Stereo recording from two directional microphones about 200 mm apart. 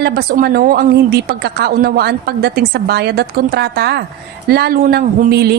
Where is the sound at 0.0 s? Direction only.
50° right (ahead or behind).